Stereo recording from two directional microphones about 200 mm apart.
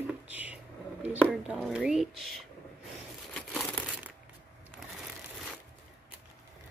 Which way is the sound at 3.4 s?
5° left (ahead or behind).